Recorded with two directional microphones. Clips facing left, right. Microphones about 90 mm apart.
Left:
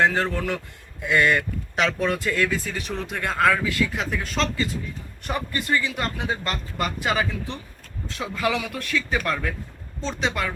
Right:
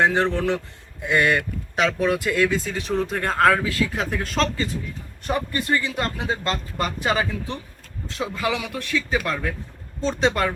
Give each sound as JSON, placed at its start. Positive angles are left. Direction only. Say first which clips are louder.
{"t": 0.0, "sound": "speech", "louder": "right 2 dB", "side_deg": -20}
{"t": 1.8, "sound": "speech", "louder": "right 2 dB", "side_deg": -5}
{"t": 10.1, "sound": "speech", "louder": "right 5 dB", "side_deg": -35}